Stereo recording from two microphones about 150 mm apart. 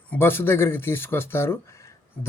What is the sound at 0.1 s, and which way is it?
Speech, 15° left (ahead or behind).